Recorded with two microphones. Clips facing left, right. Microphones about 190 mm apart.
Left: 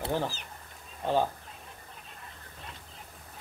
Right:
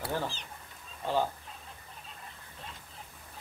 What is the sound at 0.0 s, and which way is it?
Speech, 15° left (ahead or behind).